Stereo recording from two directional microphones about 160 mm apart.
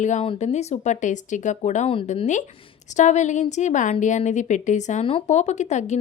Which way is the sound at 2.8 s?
50° left (ahead or behind).